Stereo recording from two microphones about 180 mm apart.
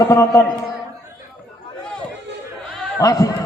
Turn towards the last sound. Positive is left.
turn(degrees=20)  # may be behind; listen again after turning